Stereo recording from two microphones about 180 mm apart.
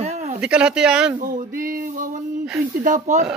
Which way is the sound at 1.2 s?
45° right (ahead or behind).